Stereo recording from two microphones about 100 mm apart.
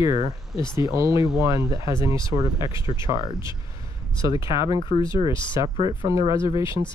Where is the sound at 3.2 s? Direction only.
50° left (ahead or behind).